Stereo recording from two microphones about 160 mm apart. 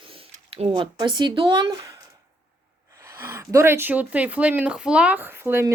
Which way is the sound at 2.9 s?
15° right (ahead or behind).